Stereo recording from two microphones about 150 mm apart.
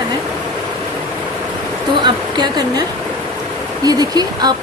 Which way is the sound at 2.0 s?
30° right (ahead or behind).